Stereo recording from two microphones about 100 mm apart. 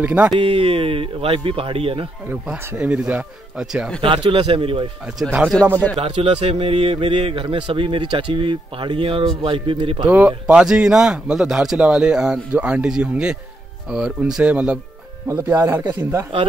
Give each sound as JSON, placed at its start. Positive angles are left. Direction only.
{"t": 0.0, "sound": "speech", "side_deg": -15}
{"t": 0.4, "sound": "speech", "side_deg": -70}
{"t": 2.2, "sound": "speech", "side_deg": -10}
{"t": 4.0, "sound": "speech", "side_deg": -65}
{"t": 5.2, "sound": "speech", "side_deg": -15}
{"t": 5.9, "sound": "speech", "side_deg": -85}
{"t": 10.0, "sound": "speech", "side_deg": -10}
{"t": 15.2, "sound": "speech", "side_deg": -25}